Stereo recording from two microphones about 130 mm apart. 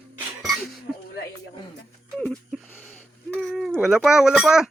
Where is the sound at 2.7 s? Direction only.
5° right (ahead or behind).